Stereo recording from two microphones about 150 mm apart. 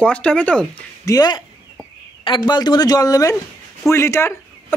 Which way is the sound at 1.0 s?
25° left (ahead or behind).